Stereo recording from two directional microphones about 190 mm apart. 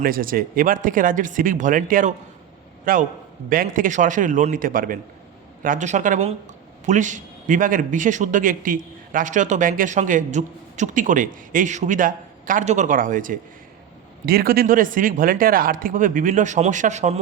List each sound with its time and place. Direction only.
0.0 s a man's voice: 50° right (ahead or behind)